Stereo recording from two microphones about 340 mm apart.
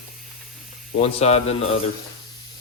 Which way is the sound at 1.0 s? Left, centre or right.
Centre.